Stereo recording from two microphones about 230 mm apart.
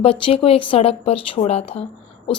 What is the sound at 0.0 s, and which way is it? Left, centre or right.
A woman's voice, left.